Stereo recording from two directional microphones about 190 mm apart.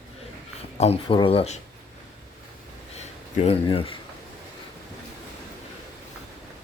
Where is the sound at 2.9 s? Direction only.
35° left (ahead or behind).